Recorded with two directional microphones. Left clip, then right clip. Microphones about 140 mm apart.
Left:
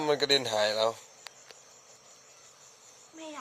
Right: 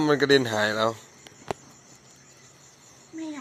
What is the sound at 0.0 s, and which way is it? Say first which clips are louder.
Speech: right 6 dB; 20° left (ahead or behind).